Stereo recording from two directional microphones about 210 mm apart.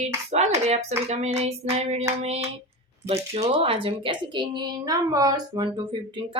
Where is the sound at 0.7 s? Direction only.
30° right (ahead or behind).